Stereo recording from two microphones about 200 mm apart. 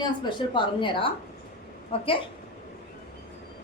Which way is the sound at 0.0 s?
25° left (ahead or behind).